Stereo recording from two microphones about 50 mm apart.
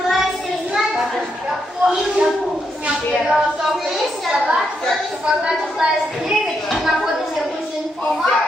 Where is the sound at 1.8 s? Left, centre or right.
Centre.